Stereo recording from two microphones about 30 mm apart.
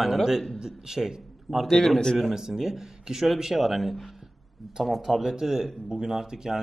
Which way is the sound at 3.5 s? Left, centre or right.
Centre.